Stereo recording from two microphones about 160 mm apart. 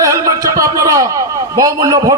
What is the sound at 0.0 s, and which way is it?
A man's voice, 20° right (ahead or behind).